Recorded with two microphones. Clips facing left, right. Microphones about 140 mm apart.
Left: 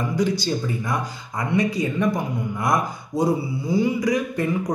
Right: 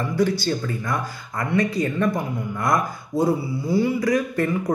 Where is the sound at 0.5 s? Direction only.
15° left (ahead or behind).